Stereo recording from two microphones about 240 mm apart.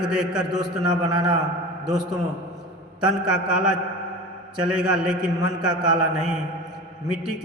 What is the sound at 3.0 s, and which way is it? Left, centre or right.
A man's voice, centre.